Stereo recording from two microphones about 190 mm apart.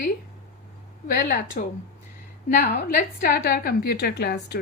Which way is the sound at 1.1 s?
45° left (ahead or behind).